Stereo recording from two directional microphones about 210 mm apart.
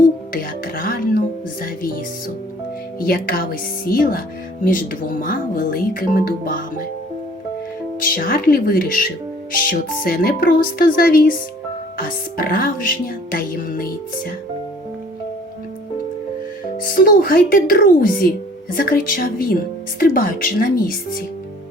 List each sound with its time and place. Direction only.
0.6 s music: 45° left (ahead or behind)
3.0 s speech: 45° left (ahead or behind)
8.0 s speech: 40° left (ahead or behind)
16.8 s speech: 40° left (ahead or behind)